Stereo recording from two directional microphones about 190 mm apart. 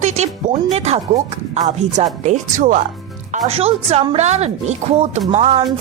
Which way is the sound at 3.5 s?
30° right (ahead or behind).